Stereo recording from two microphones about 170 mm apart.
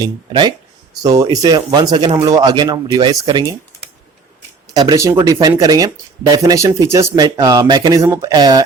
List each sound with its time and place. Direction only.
0.0 s speech: 25° right (ahead or behind)
4.7 s speech: 20° right (ahead or behind)